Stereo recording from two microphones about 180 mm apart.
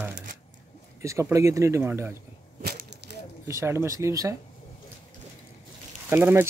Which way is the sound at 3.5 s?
15° right (ahead or behind).